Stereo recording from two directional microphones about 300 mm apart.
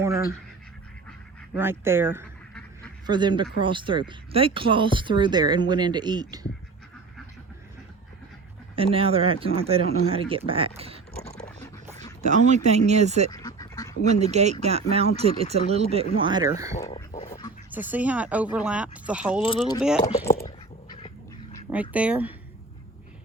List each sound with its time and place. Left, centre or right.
0.0 s goose: centre
1.5 s speech: centre
8.7 s speech: centre
12.2 s speech: right
13.3 s duck: centre
14.0 s speech: right
17.2 s a sound: centre
17.7 s speech: centre
21.7 s speech: centre